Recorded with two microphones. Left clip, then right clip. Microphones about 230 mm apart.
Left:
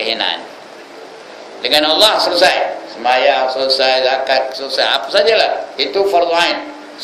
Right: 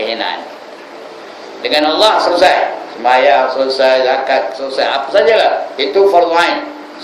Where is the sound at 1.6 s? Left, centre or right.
Left.